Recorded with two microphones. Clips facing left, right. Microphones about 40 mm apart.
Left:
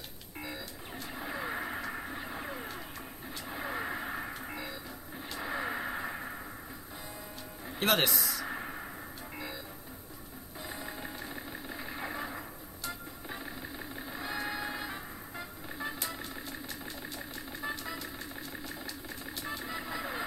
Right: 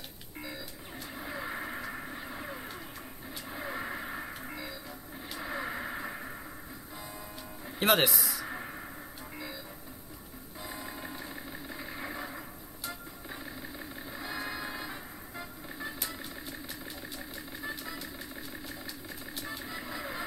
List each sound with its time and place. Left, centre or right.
1.1 s radio: centre
3.4 s vehicle: centre
5.4 s radio: centre
7.8 s a sound: centre
10.7 s a sound: centre
13.3 s vehicle: centre
17.6 s vehicle: centre
19.5 s vehicle: centre